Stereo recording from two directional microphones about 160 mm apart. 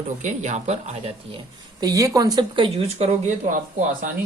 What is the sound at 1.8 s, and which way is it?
Speech, 20° right (ahead or behind).